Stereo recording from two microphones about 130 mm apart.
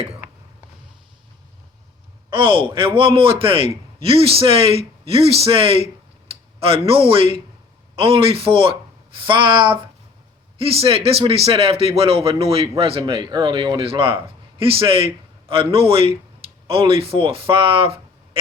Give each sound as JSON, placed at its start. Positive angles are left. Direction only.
{"t": 2.3, "sound": "a man's voice", "side_deg": -40}